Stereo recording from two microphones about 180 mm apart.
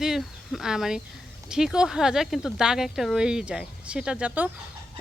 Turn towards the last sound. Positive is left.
turn(degrees=-10)  # may be behind; listen again after turning